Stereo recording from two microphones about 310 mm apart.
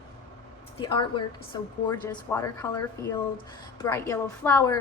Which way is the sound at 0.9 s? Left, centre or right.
Centre.